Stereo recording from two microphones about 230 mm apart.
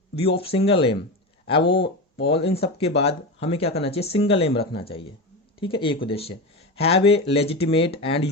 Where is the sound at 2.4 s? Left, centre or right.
Left.